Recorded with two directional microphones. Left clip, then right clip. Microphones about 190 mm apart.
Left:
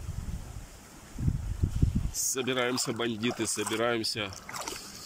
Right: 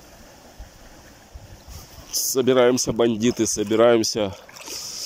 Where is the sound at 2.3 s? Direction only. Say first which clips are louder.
Right 13 dB; 40° right (ahead or behind).